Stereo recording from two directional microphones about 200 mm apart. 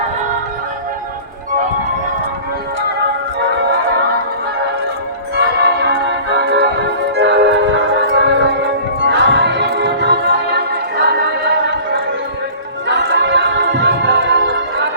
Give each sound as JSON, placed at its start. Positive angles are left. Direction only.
{"t": 5.4, "sound": "music", "side_deg": -55}